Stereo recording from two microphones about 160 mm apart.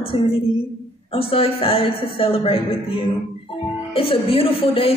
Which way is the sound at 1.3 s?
35° left (ahead or behind).